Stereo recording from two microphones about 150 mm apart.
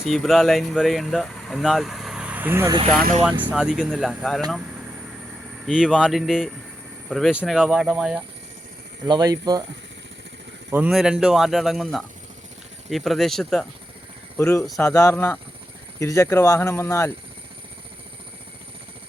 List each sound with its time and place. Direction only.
0.0 s speech: centre (ahead or behind)
3.5 s speech: 5° right (ahead or behind)
5.6 s speech: 5° right (ahead or behind)
9.0 s speech: 25° right (ahead or behind)
10.7 s speech: 5° right (ahead or behind)
14.3 s speech: 15° left (ahead or behind)